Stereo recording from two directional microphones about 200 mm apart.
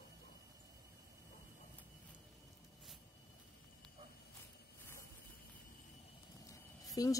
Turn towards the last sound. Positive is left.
turn(degrees=15)  # may be behind; listen again after turning